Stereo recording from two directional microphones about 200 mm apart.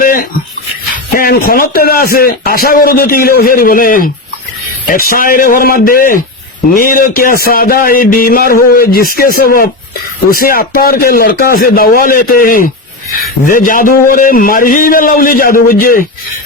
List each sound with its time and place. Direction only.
0.0 s a sound: 45° left (ahead or behind)
1.1 s music: 45° left (ahead or behind)
1.5 s speech: 45° left (ahead or behind)